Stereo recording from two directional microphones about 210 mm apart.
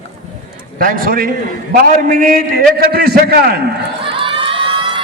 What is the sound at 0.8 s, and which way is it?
A man's voice, 40° right (ahead or behind).